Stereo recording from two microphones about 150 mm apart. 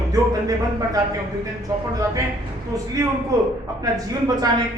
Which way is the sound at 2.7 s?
25° right (ahead or behind).